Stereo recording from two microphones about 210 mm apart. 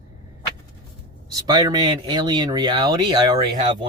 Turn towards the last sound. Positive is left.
turn(degrees=-20)  # may be behind; listen again after turning